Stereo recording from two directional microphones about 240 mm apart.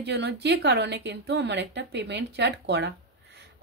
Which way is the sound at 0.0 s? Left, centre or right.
Right.